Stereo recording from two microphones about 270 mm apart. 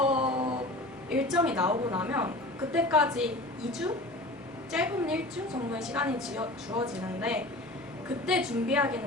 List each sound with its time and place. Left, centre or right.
0.0 s mantra: right
1.1 s a woman's voice: centre
4.7 s a woman's voice: centre